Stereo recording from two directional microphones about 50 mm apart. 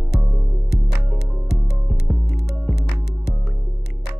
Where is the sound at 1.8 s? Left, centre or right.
Centre.